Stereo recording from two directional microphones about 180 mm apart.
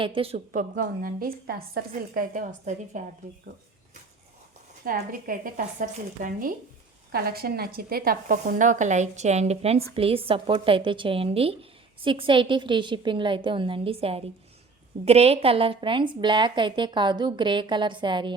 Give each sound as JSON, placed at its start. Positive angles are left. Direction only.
{"t": 0.0, "sound": "a woman's voice", "side_deg": -30}
{"t": 1.9, "sound": "a woman's voice", "side_deg": -45}
{"t": 4.9, "sound": "a woman's voice", "side_deg": -50}
{"t": 7.1, "sound": "a woman's voice", "side_deg": -55}